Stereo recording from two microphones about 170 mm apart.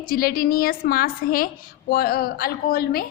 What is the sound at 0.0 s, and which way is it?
A woman's voice, 60° left (ahead or behind).